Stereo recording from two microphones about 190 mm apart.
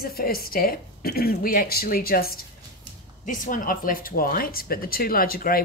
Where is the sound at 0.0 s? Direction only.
50° left (ahead or behind).